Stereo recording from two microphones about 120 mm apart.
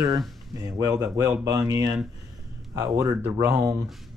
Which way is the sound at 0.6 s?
30° right (ahead or behind).